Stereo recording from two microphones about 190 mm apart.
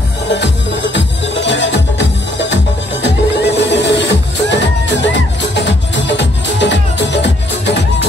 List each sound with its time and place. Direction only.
0.9 s music: 70° left (ahead or behind)